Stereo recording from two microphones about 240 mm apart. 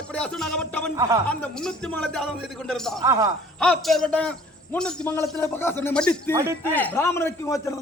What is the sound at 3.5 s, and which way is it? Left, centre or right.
A man's voice, centre.